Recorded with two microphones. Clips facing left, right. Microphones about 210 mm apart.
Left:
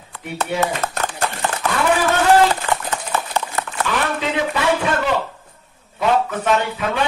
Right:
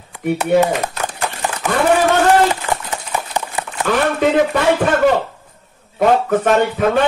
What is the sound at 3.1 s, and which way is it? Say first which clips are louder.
Horse: right 2 dB; 15° right (ahead or behind).